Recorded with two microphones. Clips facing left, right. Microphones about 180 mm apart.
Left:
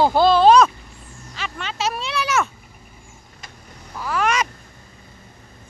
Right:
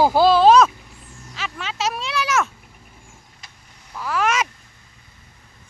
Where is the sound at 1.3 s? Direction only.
Centre (ahead or behind).